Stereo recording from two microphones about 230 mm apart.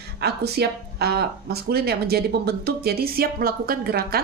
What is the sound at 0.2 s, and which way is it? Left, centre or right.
Speech, right.